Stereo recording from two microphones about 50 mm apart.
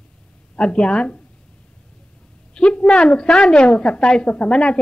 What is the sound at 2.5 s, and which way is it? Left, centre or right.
A woman's voice, centre.